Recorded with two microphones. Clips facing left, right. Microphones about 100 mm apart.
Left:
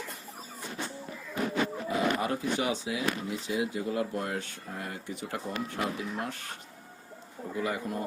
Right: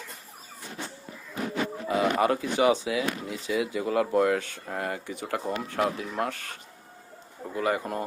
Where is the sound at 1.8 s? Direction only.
90° right.